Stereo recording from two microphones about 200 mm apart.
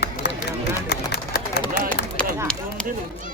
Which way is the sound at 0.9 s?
55° left (ahead or behind).